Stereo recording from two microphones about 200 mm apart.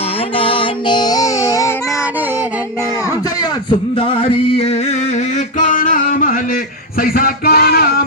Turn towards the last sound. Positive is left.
turn(degrees=50)  # may be behind; listen again after turning